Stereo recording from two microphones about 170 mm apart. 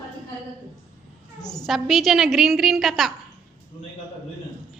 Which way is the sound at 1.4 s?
20° left (ahead or behind).